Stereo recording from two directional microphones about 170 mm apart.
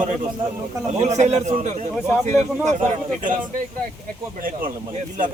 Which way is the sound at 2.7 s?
45° right (ahead or behind).